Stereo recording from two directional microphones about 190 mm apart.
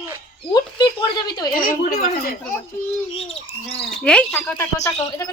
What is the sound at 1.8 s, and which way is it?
Speech, 50° left (ahead or behind).